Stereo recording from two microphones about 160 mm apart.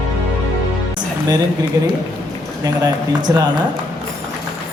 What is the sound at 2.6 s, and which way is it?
Speech, 25° right (ahead or behind).